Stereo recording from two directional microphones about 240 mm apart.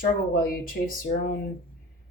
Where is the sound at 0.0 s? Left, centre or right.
Left.